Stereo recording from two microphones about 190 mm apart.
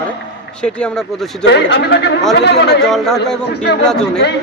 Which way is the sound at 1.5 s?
65° left (ahead or behind).